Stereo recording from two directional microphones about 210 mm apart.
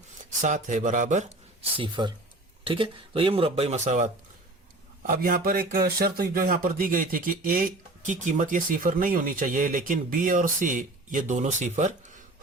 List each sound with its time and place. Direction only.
0.4 s speech: 35° right (ahead or behind)
1.7 s speech: 25° right (ahead or behind)
5.0 s speech: 45° right (ahead or behind)